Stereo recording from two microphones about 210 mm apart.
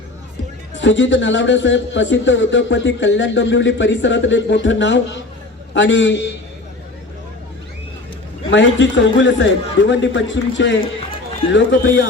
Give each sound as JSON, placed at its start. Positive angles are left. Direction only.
{"t": 0.8, "sound": "a man's voice", "side_deg": 60}
{"t": 8.4, "sound": "a man's voice", "side_deg": 60}